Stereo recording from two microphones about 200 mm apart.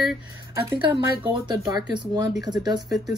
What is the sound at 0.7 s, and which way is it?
Speech, 25° right (ahead or behind).